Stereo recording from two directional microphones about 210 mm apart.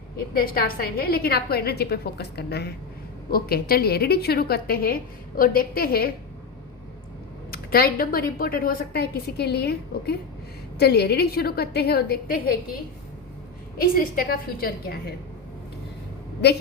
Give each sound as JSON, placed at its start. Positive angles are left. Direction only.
{"t": 0.3, "sound": "a woman's voice", "side_deg": 45}
{"t": 7.5, "sound": "a woman's voice", "side_deg": 45}
{"t": 13.7, "sound": "a woman's voice", "side_deg": 45}